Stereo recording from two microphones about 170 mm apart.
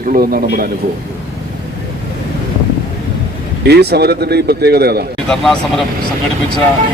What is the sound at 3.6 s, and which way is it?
Speech, 75° right (ahead or behind).